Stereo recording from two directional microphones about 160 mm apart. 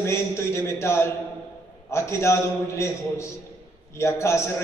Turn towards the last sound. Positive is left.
turn(degrees=15)  # may be behind; listen again after turning